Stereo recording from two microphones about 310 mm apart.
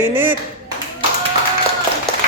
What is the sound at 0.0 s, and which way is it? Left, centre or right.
Speech, centre.